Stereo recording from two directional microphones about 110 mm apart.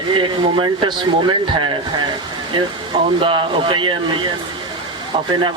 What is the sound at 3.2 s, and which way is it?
A man's voice, 50° right (ahead or behind).